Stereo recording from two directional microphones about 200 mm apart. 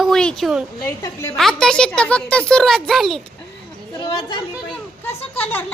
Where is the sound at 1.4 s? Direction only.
Centre (ahead or behind).